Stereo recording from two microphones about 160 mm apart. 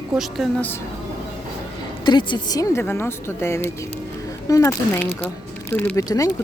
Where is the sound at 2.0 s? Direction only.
30° left (ahead or behind).